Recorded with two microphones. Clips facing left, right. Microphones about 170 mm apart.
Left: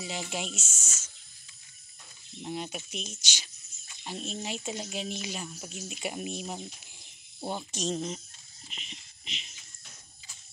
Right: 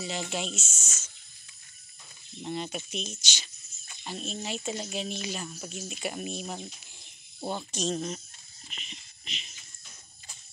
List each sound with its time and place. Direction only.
0.0 s speech: 10° left (ahead or behind)
0.6 s snake: 10° left (ahead or behind)
2.4 s speech: 5° left (ahead or behind)